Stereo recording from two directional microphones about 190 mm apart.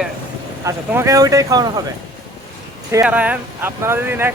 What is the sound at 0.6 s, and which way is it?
Speech, 15° right (ahead or behind).